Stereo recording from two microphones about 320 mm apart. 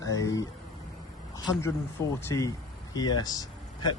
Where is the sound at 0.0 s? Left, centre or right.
Centre.